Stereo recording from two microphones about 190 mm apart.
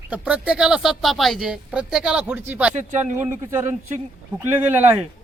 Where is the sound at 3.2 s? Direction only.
10° right (ahead or behind).